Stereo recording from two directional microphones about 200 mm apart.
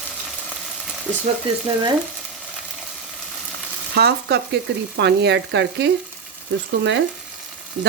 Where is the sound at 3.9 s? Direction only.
55° right (ahead or behind).